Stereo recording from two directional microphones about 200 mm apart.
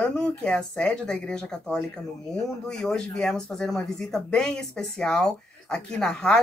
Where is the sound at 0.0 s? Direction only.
5° left (ahead or behind).